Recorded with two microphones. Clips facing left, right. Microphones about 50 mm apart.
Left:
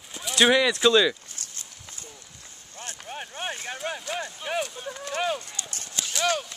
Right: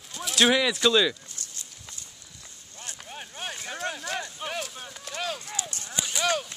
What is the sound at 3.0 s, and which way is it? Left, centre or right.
Boat, centre.